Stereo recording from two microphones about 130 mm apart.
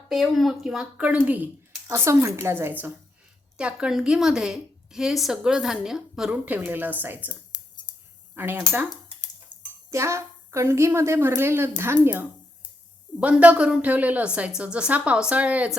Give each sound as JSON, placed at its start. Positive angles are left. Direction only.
{"t": 0.1, "sound": "a woman's voice", "side_deg": 0}
{"t": 1.9, "sound": "a woman's voice", "side_deg": -25}
{"t": 3.6, "sound": "a woman's voice", "side_deg": -5}
{"t": 8.4, "sound": "a woman's voice", "side_deg": -15}
{"t": 9.9, "sound": "a woman's voice", "side_deg": -20}